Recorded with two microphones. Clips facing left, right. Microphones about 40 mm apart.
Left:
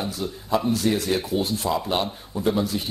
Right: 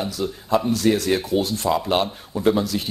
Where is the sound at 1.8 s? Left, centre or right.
Right.